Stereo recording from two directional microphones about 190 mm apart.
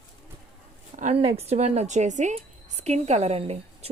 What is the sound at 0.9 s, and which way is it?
A woman's voice, 35° right (ahead or behind).